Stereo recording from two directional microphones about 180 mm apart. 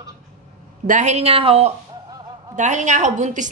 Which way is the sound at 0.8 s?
40° right (ahead or behind).